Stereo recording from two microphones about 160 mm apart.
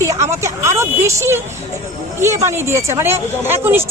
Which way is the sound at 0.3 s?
20° right (ahead or behind).